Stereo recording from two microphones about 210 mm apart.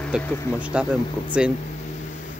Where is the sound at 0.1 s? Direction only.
5° right (ahead or behind).